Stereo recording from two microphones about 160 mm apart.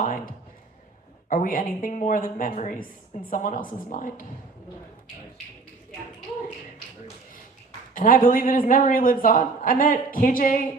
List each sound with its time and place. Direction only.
1.3 s a man's voice: 55° left (ahead or behind)
7.9 s a man's voice: 60° left (ahead or behind)